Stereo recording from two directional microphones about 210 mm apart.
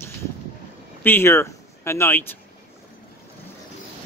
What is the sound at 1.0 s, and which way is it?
Speech, 10° left (ahead or behind).